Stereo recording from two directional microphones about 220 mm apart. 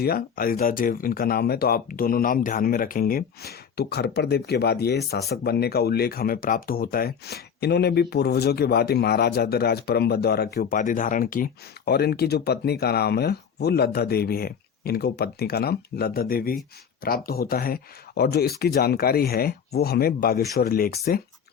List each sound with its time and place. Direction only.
0.0 s speech: 45° left (ahead or behind)